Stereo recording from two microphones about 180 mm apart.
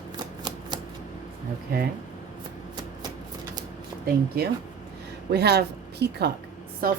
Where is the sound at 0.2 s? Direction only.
25° right (ahead or behind).